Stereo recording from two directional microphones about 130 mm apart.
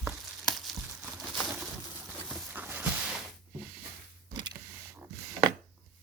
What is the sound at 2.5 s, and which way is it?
Walk, 15° right (ahead or behind).